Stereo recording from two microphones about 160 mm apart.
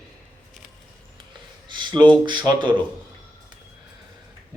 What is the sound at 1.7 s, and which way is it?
A man's voice, 30° right (ahead or behind).